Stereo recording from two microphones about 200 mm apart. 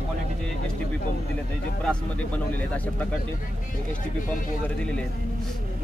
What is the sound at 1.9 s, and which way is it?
Speech, 5° left (ahead or behind).